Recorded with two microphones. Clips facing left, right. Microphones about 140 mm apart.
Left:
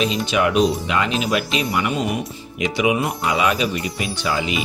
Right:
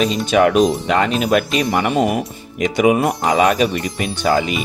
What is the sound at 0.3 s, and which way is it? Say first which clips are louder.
Speech: right 5 dB; 50° right (ahead or behind).